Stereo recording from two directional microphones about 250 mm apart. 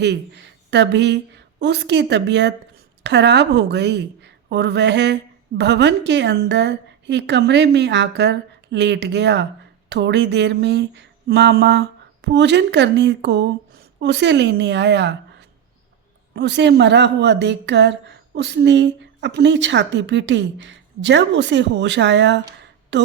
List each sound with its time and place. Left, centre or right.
0.0 s a woman's voice: right